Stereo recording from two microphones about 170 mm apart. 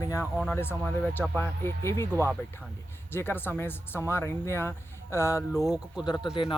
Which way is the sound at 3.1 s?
15° left (ahead or behind).